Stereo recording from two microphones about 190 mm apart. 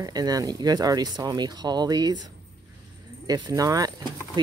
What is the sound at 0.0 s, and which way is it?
Speech, 20° right (ahead or behind).